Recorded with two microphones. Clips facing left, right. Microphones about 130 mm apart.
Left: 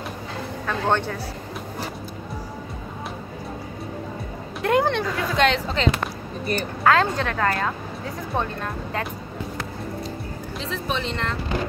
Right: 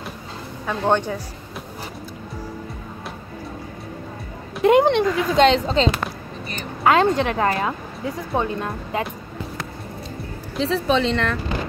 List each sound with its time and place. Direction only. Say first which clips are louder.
0.7 s speech: right 3 dB; 15° right (ahead or behind)
4.6 s speech: right 6 dB; 20° right (ahead or behind)
10.6 s speech: right 9 dB; 90° right